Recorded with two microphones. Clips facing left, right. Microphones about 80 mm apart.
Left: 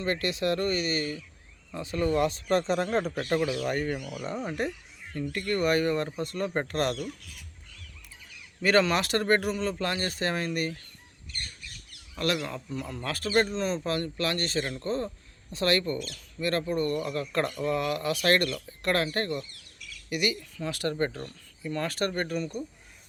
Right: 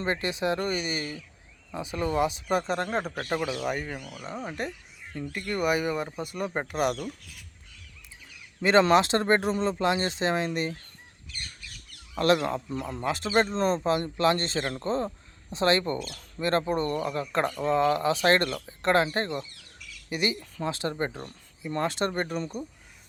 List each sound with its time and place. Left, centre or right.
0.0 s speech: right
3.8 s speech: centre
5.3 s speech: centre
8.8 s speech: right
12.2 s speech: right
12.8 s speech: right
13.8 s speech: right
20.7 s speech: right